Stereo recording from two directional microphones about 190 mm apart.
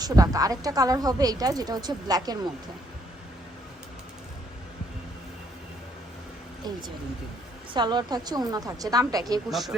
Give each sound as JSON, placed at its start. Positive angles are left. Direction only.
{"t": 0.0, "sound": "a woman's voice", "side_deg": -20}
{"t": 6.6, "sound": "a woman's voice", "side_deg": -20}
{"t": 9.5, "sound": "speech", "side_deg": 0}